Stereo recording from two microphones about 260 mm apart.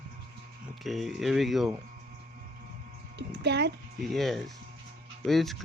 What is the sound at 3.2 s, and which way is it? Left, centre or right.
Speech, right.